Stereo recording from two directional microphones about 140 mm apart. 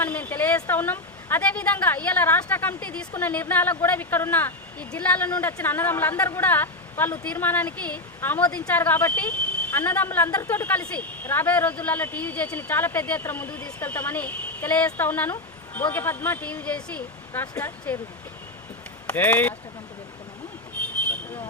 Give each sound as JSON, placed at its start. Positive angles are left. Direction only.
{"t": 0.0, "sound": "speech", "side_deg": 10}
{"t": 19.0, "sound": "speech", "side_deg": 10}